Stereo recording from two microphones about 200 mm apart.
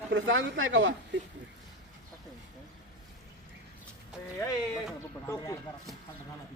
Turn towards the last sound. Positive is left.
turn(degrees=15)  # may be behind; listen again after turning